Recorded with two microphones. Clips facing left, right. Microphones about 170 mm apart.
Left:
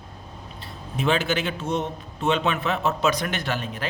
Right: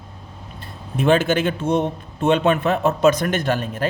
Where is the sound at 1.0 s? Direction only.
50° right (ahead or behind).